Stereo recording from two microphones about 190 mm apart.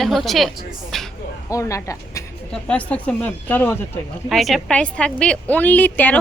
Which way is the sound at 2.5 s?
5° left (ahead or behind).